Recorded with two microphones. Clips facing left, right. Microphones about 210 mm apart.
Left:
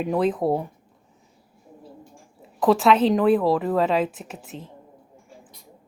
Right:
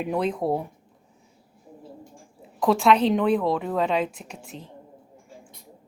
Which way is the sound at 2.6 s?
Centre (ahead or behind).